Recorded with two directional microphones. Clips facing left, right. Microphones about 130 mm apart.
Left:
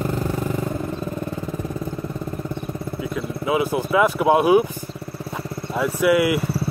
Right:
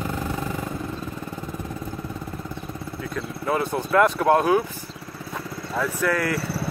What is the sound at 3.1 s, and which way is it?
Speech, 5° left (ahead or behind).